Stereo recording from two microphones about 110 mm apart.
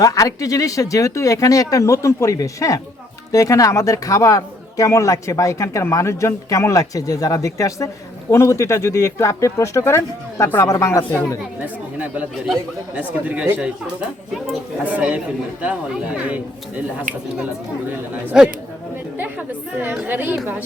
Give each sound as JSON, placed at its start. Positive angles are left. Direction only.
{"t": 0.0, "sound": "a man's voice", "side_deg": 30}
{"t": 11.6, "sound": "a woman's voice", "side_deg": -15}
{"t": 14.8, "sound": "a woman's voice", "side_deg": -15}
{"t": 18.3, "sound": "a man's voice", "side_deg": -5}
{"t": 19.1, "sound": "a woman's voice", "side_deg": -15}